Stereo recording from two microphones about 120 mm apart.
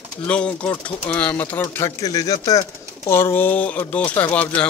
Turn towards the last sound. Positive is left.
turn(degrees=10)  # may be behind; listen again after turning